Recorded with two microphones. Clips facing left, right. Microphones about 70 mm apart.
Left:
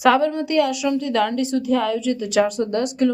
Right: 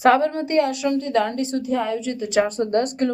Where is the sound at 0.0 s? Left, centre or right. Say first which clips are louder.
Even; right.